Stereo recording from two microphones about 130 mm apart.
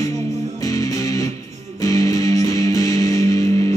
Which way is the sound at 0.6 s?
25° left (ahead or behind).